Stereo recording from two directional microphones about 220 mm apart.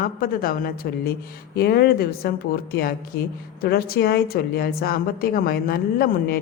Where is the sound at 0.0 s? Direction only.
40° left (ahead or behind).